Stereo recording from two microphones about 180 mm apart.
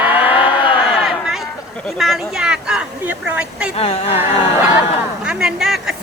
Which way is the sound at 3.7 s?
35° left (ahead or behind).